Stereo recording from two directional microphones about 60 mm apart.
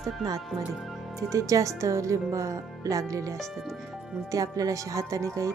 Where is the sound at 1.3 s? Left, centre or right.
Right.